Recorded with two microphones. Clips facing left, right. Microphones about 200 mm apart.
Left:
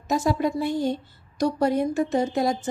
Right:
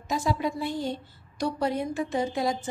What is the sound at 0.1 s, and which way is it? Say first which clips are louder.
Speech: left 5 dB; 45° left (ahead or behind).